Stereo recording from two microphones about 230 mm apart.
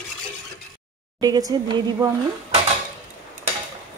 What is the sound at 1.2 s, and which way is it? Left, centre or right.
Speech, centre.